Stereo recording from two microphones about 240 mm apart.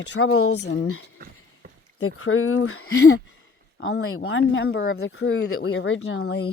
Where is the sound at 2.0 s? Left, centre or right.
Left.